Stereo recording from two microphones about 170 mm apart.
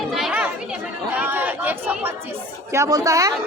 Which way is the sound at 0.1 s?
5° right (ahead or behind).